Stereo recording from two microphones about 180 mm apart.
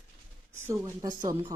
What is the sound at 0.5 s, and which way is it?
Speech, 15° right (ahead or behind).